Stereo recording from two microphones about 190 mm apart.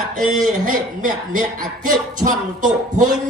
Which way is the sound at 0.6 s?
45° right (ahead or behind).